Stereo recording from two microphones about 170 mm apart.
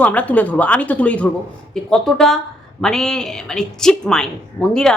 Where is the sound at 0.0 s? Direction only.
10° left (ahead or behind).